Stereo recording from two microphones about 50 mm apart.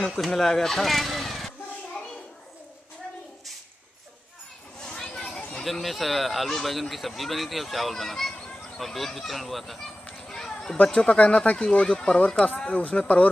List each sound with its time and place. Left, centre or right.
0.0 s speech: centre
4.8 s a sound: centre
5.6 s speech: centre
10.2 s a sound: centre
10.9 s speech: centre
11.1 s speech: left